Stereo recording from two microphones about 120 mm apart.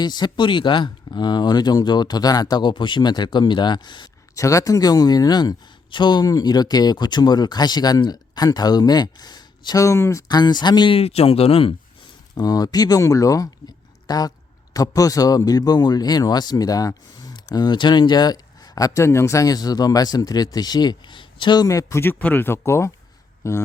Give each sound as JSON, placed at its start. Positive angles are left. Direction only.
{"t": 0.0, "sound": "a man's voice", "side_deg": 35}
{"t": 4.4, "sound": "a man's voice", "side_deg": 25}
{"t": 12.3, "sound": "a man's voice", "side_deg": 35}